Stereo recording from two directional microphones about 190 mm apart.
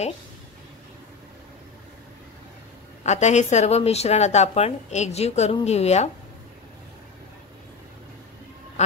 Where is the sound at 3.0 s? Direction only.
35° left (ahead or behind).